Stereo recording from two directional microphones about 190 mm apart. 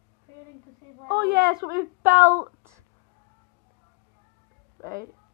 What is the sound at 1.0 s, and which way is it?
A woman's voice, 60° right (ahead or behind).